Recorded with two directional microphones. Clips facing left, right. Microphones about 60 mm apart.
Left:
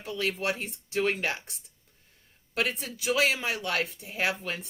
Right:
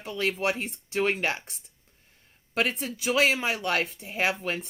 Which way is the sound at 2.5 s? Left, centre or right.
Right.